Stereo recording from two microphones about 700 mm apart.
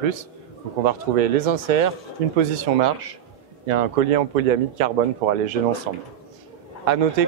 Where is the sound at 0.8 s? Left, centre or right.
Right.